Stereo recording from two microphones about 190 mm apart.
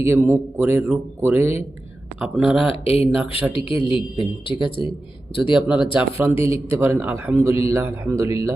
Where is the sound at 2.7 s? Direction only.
30° left (ahead or behind).